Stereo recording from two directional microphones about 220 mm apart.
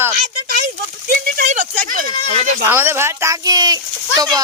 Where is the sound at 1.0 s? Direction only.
35° right (ahead or behind).